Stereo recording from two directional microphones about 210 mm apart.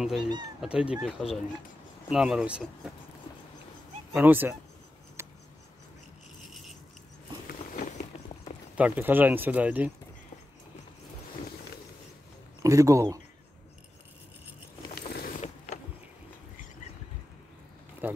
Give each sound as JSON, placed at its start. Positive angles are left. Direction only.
{"t": 0.0, "sound": "speech", "side_deg": 0}
{"t": 4.1, "sound": "speech", "side_deg": -10}
{"t": 5.2, "sound": "a sound", "side_deg": -10}
{"t": 7.4, "sound": "biting", "side_deg": 40}
{"t": 8.7, "sound": "speech", "side_deg": -5}
{"t": 12.6, "sound": "speech", "side_deg": -15}
{"t": 15.0, "sound": "mechanisms", "side_deg": 45}
{"t": 18.0, "sound": "speech", "side_deg": -10}